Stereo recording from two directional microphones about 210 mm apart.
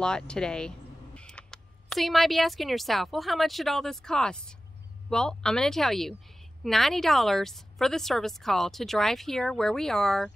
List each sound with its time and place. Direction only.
0.0 s a woman's voice: 5° left (ahead or behind)